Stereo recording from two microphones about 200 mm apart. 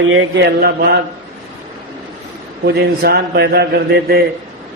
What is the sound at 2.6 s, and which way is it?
A man's voice, 50° right (ahead or behind).